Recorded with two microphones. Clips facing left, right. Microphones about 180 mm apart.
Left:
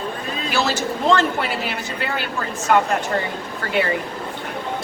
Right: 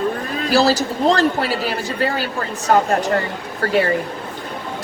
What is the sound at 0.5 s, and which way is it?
A woman's voice, 35° right (ahead or behind).